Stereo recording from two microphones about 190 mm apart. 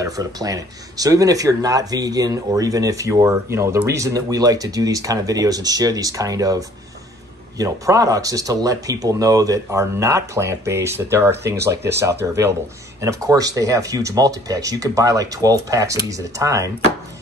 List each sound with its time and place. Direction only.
0.0 s speech: 20° right (ahead or behind)